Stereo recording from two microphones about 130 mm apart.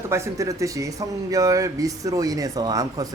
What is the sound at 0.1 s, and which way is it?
Speech, 25° right (ahead or behind).